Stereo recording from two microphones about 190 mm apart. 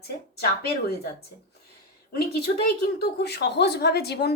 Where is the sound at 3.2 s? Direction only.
60° left (ahead or behind).